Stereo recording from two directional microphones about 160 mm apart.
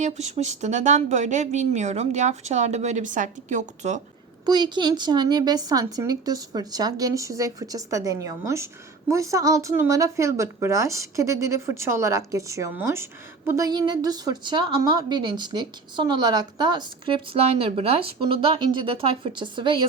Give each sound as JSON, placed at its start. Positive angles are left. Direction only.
{"t": 0.0, "sound": "speech", "side_deg": -45}
{"t": 4.4, "sound": "a woman's voice", "side_deg": -25}